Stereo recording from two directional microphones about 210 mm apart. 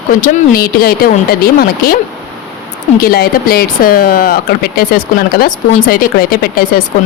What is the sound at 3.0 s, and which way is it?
Speech, 45° left (ahead or behind).